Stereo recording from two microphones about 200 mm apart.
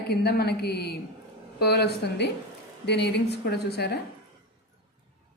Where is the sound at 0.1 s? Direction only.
55° left (ahead or behind).